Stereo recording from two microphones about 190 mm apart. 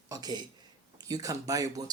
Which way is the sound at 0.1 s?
20° right (ahead or behind).